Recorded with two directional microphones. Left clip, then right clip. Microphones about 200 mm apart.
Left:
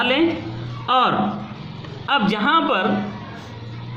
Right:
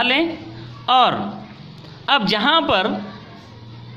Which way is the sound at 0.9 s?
40° right (ahead or behind).